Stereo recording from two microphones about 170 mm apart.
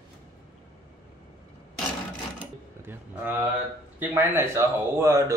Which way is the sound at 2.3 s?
10° right (ahead or behind).